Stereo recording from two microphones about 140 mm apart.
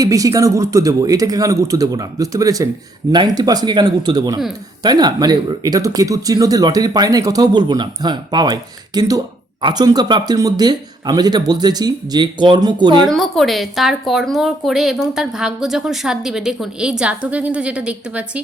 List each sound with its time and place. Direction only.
0.0 s speech: 25° right (ahead or behind)
13.1 s a woman's voice: centre (ahead or behind)